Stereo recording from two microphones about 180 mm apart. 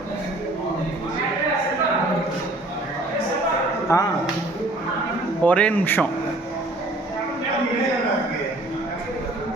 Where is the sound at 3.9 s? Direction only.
15° left (ahead or behind).